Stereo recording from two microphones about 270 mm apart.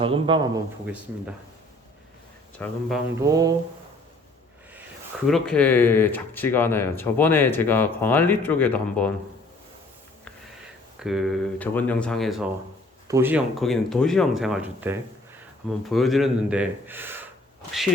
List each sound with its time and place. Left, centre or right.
0.0 s speech: centre
2.6 s speech: centre
3.2 s speech: centre
5.2 s speech: centre
11.0 s speech: centre